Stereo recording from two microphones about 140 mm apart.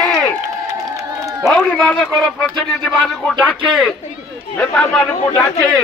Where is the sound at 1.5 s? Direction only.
5° left (ahead or behind).